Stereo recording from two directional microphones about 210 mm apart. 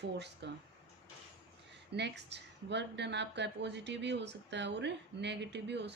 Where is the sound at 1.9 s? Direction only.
55° right (ahead or behind).